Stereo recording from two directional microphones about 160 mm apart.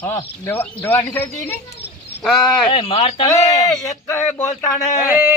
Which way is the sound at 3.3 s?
20° left (ahead or behind).